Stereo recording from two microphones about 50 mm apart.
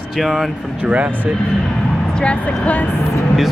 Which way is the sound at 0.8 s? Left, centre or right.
Right.